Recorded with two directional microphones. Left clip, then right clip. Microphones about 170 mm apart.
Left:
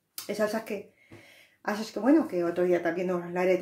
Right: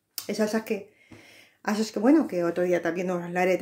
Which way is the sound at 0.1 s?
30° right (ahead or behind).